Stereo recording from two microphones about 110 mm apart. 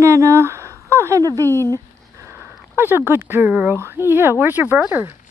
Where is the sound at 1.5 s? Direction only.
20° left (ahead or behind).